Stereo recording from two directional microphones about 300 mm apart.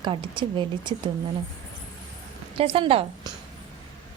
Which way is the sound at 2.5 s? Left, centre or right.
Centre.